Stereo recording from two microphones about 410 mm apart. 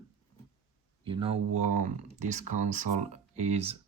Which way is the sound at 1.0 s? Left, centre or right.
Centre.